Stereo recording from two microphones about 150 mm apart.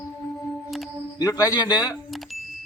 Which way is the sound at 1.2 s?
25° left (ahead or behind).